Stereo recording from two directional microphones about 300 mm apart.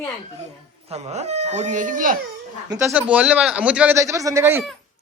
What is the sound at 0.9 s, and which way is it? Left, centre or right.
Speech, right.